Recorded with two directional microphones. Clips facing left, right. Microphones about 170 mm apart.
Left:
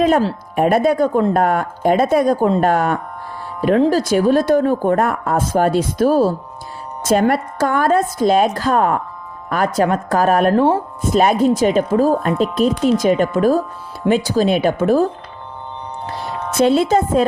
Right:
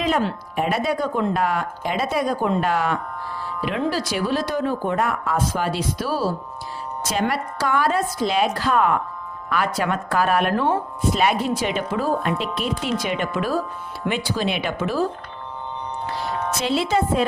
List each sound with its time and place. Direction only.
0.0 s speech: 50° left (ahead or behind)
3.4 s music: 45° left (ahead or behind)
3.8 s a woman's voice: 45° left (ahead or behind)
16.6 s speech: 50° left (ahead or behind)